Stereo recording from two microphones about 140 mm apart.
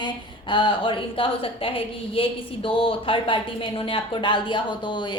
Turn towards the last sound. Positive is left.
turn(degrees=35)  # may be behind; listen again after turning